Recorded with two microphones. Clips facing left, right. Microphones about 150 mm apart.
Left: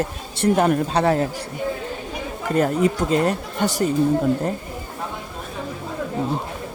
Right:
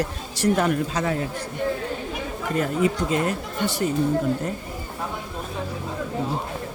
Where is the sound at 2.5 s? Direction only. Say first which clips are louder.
Left 4 dB; 40° left (ahead or behind).